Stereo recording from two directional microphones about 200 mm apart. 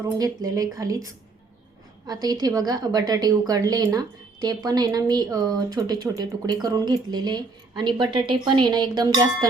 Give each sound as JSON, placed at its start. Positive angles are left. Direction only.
{"t": 0.0, "sound": "speech", "side_deg": -15}
{"t": 2.2, "sound": "a woman's voice", "side_deg": -20}